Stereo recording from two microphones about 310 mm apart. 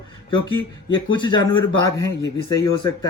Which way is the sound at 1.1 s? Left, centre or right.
Centre.